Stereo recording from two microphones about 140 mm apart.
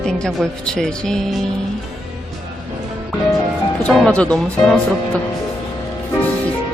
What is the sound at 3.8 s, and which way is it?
Speech, 10° left (ahead or behind).